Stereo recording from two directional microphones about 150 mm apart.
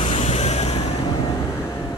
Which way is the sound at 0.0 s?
45° left (ahead or behind).